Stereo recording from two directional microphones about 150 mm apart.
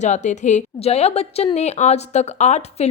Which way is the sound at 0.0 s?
55° left (ahead or behind).